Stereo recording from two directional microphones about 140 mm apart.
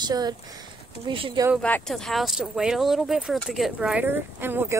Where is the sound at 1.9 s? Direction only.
Centre (ahead or behind); by 4.8 s 15° right (ahead or behind).